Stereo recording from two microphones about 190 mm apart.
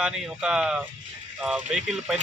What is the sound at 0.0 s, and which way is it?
A man's voice, 5° right (ahead or behind).